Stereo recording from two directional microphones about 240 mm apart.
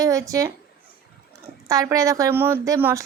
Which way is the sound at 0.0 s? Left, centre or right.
Centre.